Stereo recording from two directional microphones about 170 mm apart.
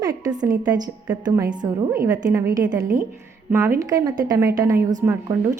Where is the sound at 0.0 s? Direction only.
20° right (ahead or behind).